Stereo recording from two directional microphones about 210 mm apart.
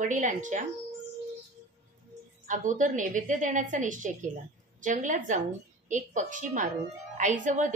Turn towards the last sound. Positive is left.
turn(degrees=-35)  # may be behind; listen again after turning